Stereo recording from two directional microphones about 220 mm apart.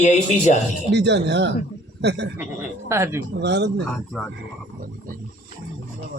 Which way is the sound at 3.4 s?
50° right (ahead or behind).